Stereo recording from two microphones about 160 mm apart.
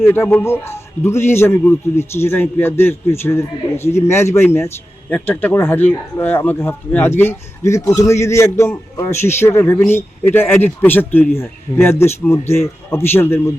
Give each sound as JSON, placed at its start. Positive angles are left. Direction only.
{"t": 0.0, "sound": "speech", "side_deg": 15}